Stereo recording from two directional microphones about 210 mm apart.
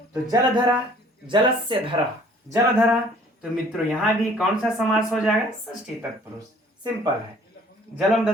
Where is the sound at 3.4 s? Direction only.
Centre (ahead or behind).